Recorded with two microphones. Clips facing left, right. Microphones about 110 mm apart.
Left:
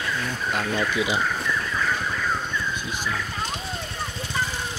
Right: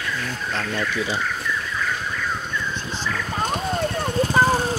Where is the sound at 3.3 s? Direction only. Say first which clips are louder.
Right 7 dB; 55° right (ahead or behind).